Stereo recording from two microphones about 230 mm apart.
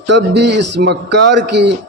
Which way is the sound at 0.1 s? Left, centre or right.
Right.